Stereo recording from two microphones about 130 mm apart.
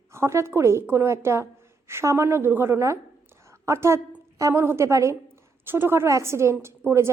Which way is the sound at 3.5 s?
20° right (ahead or behind).